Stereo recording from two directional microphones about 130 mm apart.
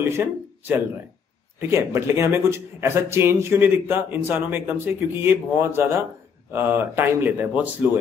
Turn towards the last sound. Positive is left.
turn(degrees=-15)  # may be behind; listen again after turning